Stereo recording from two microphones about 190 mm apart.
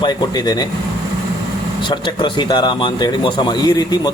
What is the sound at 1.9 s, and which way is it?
A man's voice, 25° left (ahead or behind).